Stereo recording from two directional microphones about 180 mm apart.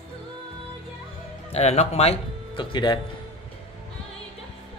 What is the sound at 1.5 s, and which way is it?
Speech, 35° left (ahead or behind).